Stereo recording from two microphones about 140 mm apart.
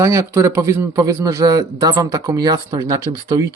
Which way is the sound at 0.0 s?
20° right (ahead or behind).